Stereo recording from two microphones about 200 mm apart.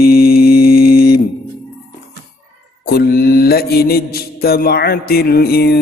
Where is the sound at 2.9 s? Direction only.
50° left (ahead or behind).